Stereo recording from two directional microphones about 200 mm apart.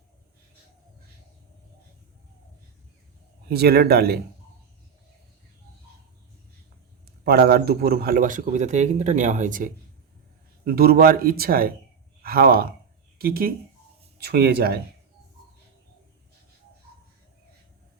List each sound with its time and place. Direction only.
3.5 s speech: 50° right (ahead or behind)
7.3 s a man's voice: 50° right (ahead or behind)